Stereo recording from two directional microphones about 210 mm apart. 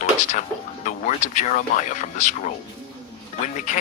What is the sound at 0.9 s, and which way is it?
Speech, 35° left (ahead or behind).